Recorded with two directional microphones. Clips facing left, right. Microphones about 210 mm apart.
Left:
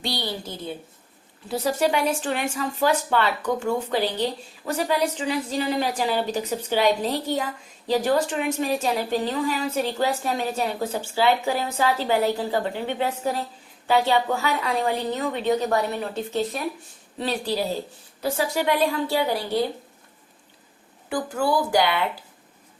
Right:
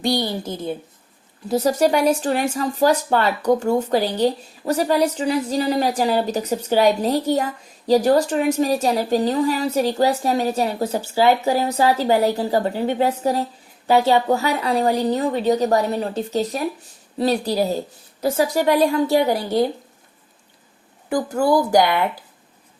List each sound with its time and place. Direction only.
0.0 s a woman's voice: 45° right (ahead or behind)
21.1 s a woman's voice: 40° right (ahead or behind)